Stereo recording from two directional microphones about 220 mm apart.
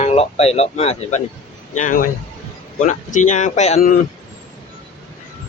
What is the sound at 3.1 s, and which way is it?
Speech, 35° left (ahead or behind).